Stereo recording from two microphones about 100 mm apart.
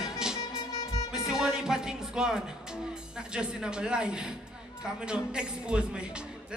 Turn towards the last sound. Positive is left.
turn(degrees=-10)  # may be behind; listen again after turning